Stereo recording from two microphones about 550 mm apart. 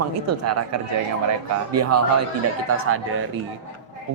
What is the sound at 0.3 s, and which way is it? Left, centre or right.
A man's voice, right.